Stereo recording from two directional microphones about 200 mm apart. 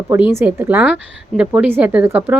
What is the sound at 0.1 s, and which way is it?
A woman's voice, 10° right (ahead or behind).